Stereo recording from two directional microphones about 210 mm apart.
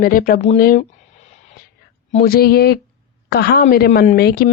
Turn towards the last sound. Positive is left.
turn(degrees=50)  # may be behind; listen again after turning